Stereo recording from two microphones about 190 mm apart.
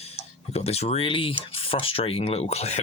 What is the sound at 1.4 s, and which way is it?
Speech, 30° left (ahead or behind).